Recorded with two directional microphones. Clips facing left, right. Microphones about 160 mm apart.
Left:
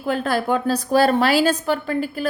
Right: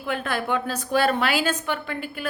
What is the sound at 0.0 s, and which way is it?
A woman's voice, 35° left (ahead or behind).